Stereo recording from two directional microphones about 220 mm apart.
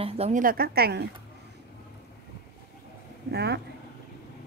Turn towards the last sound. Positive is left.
turn(degrees=-50)  # may be behind; listen again after turning